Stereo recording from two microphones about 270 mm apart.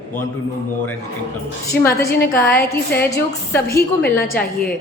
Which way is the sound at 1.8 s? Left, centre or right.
Centre.